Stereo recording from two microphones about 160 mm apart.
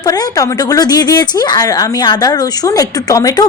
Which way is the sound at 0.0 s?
25° left (ahead or behind).